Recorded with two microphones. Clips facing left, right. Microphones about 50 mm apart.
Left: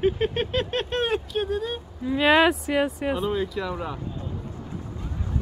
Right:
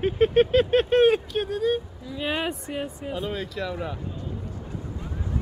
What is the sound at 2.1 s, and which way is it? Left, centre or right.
Speech, left.